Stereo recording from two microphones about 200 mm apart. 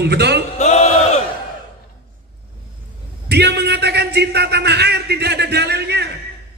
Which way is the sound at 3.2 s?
55° right (ahead or behind).